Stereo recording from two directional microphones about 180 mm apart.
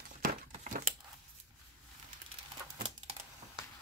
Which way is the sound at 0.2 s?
45° right (ahead or behind).